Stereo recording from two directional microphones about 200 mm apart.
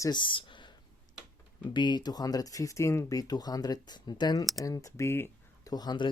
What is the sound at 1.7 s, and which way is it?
Speech, 20° left (ahead or behind).